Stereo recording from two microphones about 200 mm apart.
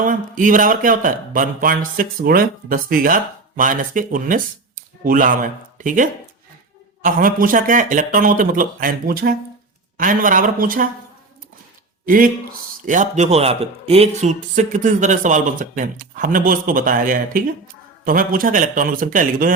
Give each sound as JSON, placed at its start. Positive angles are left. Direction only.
{"t": 0.0, "sound": "speech", "side_deg": -40}
{"t": 12.0, "sound": "a man's voice", "side_deg": -45}